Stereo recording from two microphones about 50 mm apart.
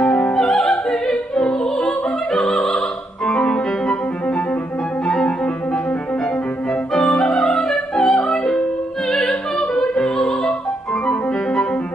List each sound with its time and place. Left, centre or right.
0.0 s music: left
0.4 s music: centre
1.0 s opera: centre
1.9 s opera: centre
3.3 s music: left
5.0 s music: centre
6.9 s music: centre
9.1 s opera: centre
9.6 s opera: centre